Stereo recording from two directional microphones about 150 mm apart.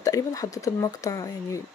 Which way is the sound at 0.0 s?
25° left (ahead or behind).